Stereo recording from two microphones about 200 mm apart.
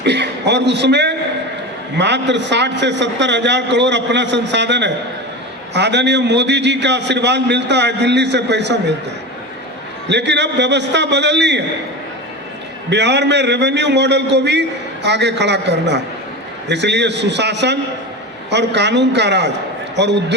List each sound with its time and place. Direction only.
0.0 s a man's voice: 60° right (ahead or behind)
10.1 s a man's voice: 60° right (ahead or behind)
12.9 s a man's voice: 60° right (ahead or behind)